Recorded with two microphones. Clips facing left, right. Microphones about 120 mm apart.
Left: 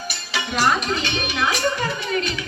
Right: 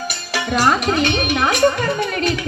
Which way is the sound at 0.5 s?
55° right (ahead or behind).